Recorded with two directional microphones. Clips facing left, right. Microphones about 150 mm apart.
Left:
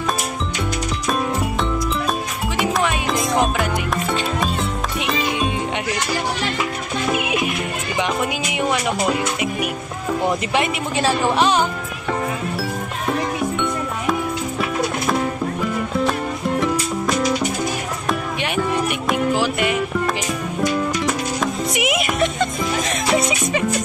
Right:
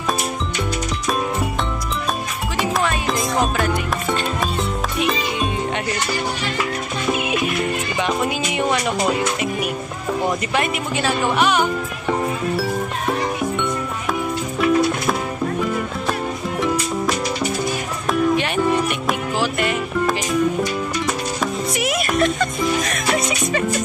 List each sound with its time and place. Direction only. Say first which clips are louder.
8.5 s music: left 1 dB; 5° left (ahead or behind)
11.0 s speech: left 2 dB; 30° left (ahead or behind)
19.4 s music: left 1 dB; 10° left (ahead or behind)
21.7 s music: right 1 dB; 15° left (ahead or behind)